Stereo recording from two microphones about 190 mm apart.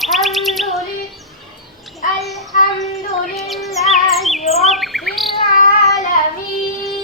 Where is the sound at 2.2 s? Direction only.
Centre (ahead or behind).